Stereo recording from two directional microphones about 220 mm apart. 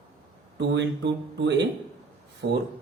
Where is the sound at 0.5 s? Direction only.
55° right (ahead or behind).